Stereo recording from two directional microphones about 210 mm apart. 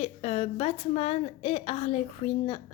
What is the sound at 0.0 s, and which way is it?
A woman's voice, 30° left (ahead or behind).